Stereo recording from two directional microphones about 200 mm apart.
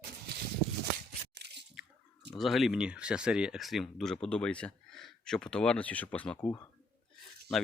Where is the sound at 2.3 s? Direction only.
Centre (ahead or behind).